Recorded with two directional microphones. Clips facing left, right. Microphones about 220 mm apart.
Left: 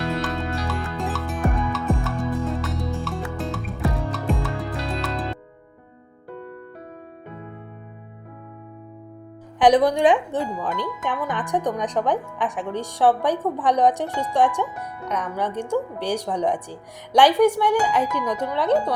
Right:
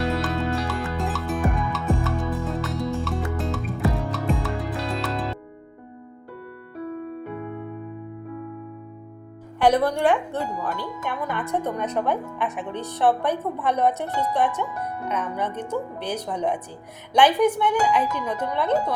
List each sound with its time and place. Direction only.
0.2 s music: centre (ahead or behind)
9.6 s a woman's voice: 15° left (ahead or behind)